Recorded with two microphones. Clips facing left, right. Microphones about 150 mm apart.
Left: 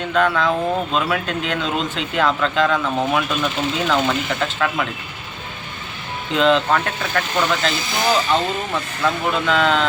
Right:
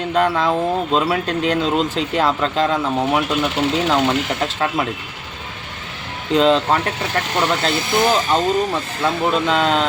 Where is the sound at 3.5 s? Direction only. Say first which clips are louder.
Right 3 dB; 75° right (ahead or behind).